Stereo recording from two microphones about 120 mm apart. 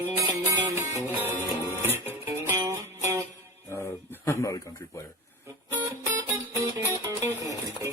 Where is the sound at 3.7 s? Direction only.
25° left (ahead or behind).